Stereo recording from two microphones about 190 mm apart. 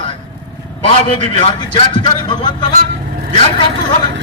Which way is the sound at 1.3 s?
25° left (ahead or behind).